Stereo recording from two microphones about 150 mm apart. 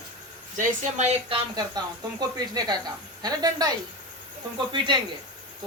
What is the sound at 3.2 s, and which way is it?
Speech, 25° right (ahead or behind).